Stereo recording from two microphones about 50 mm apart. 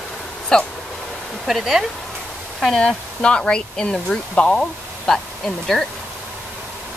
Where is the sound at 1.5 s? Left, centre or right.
Centre.